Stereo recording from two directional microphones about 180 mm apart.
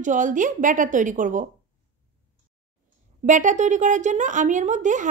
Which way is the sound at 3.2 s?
45° right (ahead or behind).